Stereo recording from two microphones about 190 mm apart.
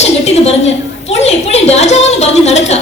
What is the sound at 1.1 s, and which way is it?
A woman's voice, 35° left (ahead or behind).